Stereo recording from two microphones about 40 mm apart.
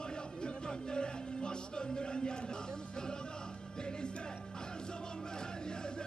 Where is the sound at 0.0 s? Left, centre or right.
Left.